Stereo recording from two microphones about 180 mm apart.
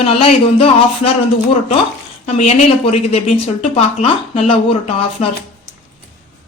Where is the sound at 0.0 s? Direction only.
30° left (ahead or behind).